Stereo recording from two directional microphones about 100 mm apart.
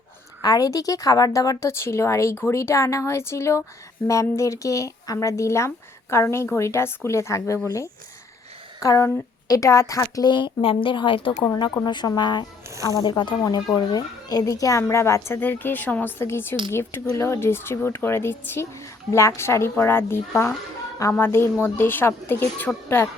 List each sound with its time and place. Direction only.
0.4 s a woman's voice: 40° left (ahead or behind)
8.8 s a woman's voice: 35° left (ahead or behind); by 11.3 s 60° left (ahead or behind)
11.9 s a woman's voice: 45° left (ahead or behind)
12.7 s speech: 35° right (ahead or behind)
13.0 s a woman's voice: 50° left (ahead or behind)
13.4 s speech: 40° left (ahead or behind); by 22.7 s 20° left (ahead or behind)